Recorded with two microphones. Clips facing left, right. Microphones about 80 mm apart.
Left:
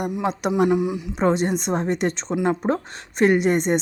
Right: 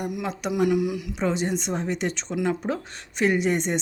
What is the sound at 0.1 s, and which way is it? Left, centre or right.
Speech, left.